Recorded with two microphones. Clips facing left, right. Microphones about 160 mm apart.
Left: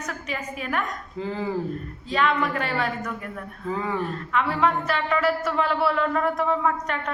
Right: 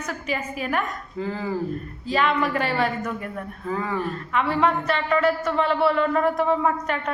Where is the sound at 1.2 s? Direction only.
20° left (ahead or behind).